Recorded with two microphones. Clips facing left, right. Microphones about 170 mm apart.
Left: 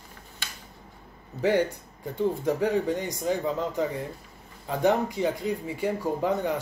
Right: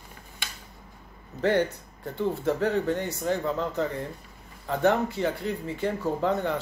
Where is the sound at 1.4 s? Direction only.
10° left (ahead or behind).